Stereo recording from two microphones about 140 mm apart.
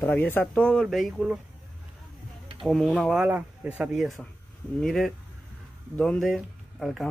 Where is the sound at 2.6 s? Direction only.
Centre (ahead or behind).